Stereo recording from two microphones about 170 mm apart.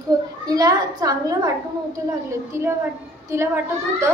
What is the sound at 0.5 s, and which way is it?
A woman's voice, 20° right (ahead or behind).